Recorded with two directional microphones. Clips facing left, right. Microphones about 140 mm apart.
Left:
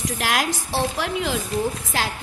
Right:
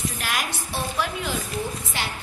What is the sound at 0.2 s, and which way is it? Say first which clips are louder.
A woman's voice: left 5 dB; 90° left.